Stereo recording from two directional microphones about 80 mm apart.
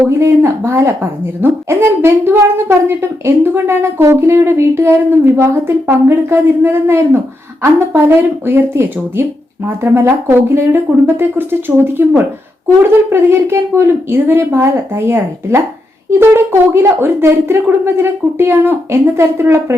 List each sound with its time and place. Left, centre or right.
0.2 s a woman's voice: right